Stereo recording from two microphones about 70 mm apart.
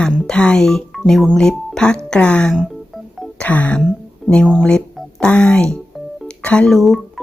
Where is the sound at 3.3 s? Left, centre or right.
Left.